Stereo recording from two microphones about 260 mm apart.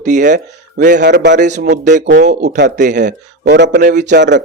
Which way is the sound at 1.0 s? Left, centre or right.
Right.